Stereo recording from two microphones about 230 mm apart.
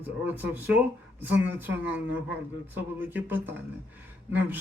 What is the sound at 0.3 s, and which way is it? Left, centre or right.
Speech, centre.